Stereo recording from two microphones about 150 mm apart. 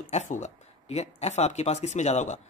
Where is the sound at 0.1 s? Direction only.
50° left (ahead or behind).